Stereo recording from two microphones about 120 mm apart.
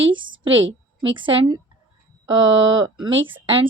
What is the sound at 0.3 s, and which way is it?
A woman's voice, 40° right (ahead or behind).